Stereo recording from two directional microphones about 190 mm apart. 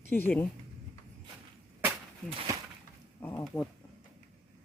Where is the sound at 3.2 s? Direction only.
15° left (ahead or behind).